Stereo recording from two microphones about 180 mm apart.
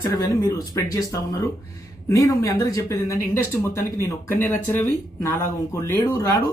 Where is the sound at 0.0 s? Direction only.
20° left (ahead or behind).